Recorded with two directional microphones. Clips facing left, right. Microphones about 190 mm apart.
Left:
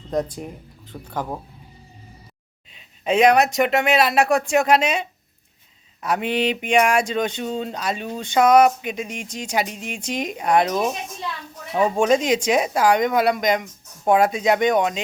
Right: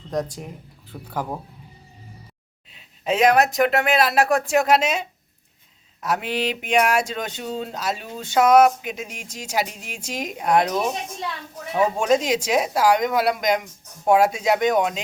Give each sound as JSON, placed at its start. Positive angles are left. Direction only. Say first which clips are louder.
{"t": 0.1, "sound": "speech", "louder": "left 2 dB", "side_deg": 0}
{"t": 2.7, "sound": "speech", "louder": "left 3 dB", "side_deg": 0}